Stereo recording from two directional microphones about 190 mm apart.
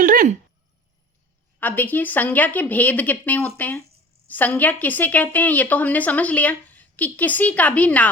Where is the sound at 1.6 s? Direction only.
10° left (ahead or behind).